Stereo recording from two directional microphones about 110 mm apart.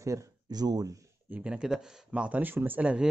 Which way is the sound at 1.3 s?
10° right (ahead or behind).